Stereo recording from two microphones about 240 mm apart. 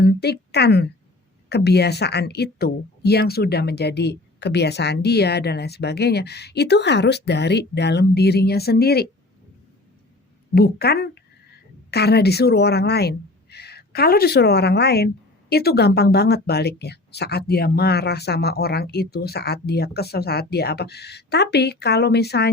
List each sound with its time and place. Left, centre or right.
0.0 s a woman's voice: left
10.5 s speech: left